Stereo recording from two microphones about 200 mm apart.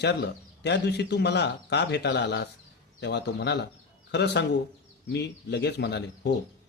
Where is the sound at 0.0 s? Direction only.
55° left (ahead or behind).